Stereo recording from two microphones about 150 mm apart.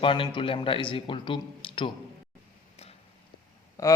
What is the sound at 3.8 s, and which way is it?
Speech, 20° left (ahead or behind).